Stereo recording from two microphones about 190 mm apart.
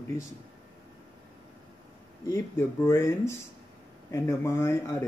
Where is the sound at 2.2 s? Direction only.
15° left (ahead or behind).